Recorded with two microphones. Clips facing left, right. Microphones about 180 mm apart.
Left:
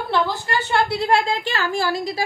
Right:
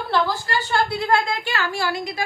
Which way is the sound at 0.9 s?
30° left (ahead or behind).